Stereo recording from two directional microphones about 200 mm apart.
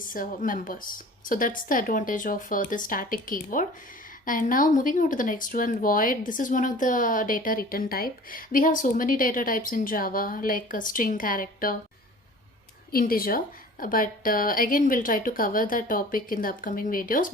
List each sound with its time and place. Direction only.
0.1 s speech: 45° left (ahead or behind)
12.9 s speech: 45° left (ahead or behind)